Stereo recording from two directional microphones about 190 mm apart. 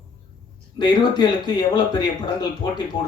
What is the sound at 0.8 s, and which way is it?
Speech, 20° left (ahead or behind).